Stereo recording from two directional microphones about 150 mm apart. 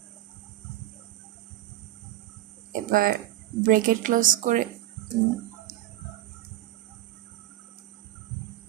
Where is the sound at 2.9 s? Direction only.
75° right (ahead or behind).